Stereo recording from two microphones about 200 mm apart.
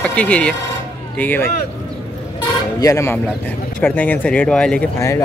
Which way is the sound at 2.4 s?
15° left (ahead or behind).